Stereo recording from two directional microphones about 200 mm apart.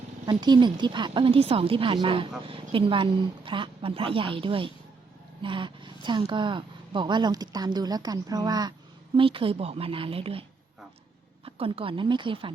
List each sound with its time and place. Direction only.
0.3 s speech: 20° right (ahead or behind)
11.4 s speech: 25° right (ahead or behind)